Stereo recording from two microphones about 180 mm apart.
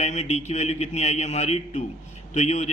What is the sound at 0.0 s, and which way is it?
A man's voice, 40° left (ahead or behind).